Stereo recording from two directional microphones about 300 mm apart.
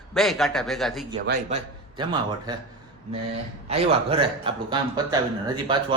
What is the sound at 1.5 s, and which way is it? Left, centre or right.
A man's voice, right.